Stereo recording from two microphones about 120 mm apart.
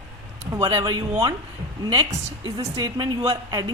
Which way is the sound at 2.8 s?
35° right (ahead or behind).